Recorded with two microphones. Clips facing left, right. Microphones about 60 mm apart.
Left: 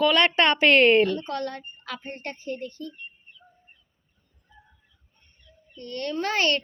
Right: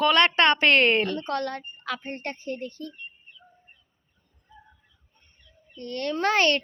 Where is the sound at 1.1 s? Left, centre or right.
Right.